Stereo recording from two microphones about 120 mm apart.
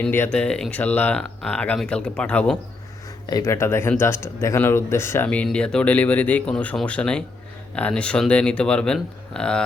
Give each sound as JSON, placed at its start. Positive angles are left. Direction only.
{"t": 0.0, "sound": "speech", "side_deg": 15}
{"t": 3.2, "sound": "speech", "side_deg": 30}